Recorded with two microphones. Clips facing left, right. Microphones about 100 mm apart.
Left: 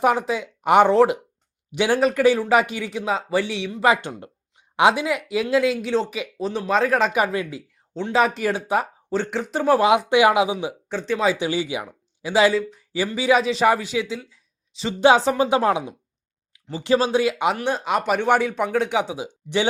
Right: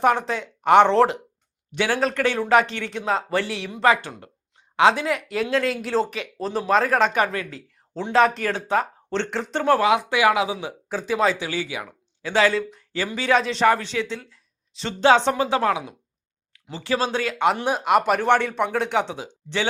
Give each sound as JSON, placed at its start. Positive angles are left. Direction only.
{"t": 0.0, "sound": "speech", "side_deg": 5}
{"t": 3.8, "sound": "speech", "side_deg": 15}
{"t": 10.8, "sound": "speech", "side_deg": -5}
{"t": 11.3, "sound": "a man's voice", "side_deg": 20}
{"t": 15.4, "sound": "speech", "side_deg": 20}
{"t": 17.7, "sound": "speech", "side_deg": -5}
{"t": 19.1, "sound": "speech", "side_deg": 15}